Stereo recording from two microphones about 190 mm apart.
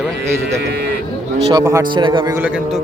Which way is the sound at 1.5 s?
20° right (ahead or behind).